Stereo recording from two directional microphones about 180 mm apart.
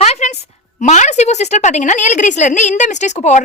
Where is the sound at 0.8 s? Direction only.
40° left (ahead or behind).